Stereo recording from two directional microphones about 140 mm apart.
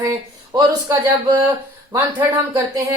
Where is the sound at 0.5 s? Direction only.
30° right (ahead or behind).